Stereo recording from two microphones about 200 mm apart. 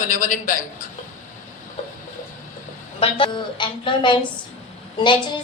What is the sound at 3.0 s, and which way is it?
A woman's voice, 25° left (ahead or behind).